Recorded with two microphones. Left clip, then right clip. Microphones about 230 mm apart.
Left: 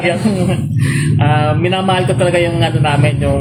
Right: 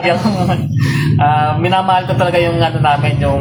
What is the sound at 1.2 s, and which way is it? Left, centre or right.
A man's voice, right.